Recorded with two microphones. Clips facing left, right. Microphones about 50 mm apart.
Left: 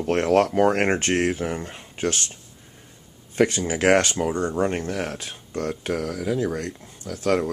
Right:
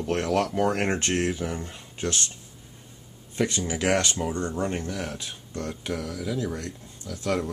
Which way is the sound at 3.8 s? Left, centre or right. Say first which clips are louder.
Left 6 dB; left.